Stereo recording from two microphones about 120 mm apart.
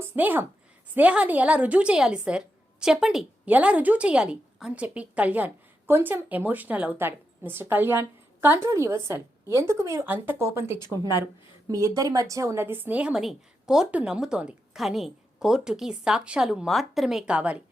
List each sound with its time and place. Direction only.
0.2 s a woman's voice: 15° right (ahead or behind)
10.8 s speech: 35° left (ahead or behind)
11.7 s a woman's voice: 30° right (ahead or behind); by 17.6 s 10° right (ahead or behind)